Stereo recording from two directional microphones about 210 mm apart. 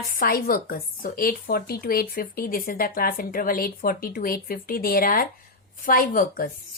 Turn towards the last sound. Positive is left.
turn(degrees=45)  # may be behind; listen again after turning